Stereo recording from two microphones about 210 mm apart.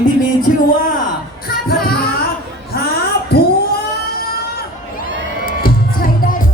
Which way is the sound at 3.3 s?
50° left (ahead or behind).